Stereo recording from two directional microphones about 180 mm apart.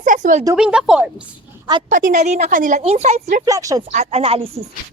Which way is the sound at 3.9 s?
35° right (ahead or behind).